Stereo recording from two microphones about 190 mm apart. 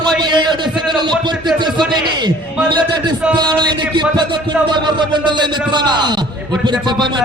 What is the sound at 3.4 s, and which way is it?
Music, 20° right (ahead or behind).